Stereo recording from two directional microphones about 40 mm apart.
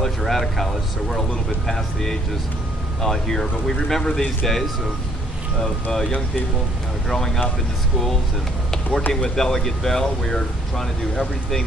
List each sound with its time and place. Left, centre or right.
0.0 s speech: centre
5.6 s speech: centre
8.9 s speech: left
9.3 s speech: centre